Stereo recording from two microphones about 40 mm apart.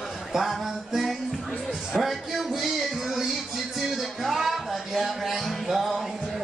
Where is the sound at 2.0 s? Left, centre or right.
Centre.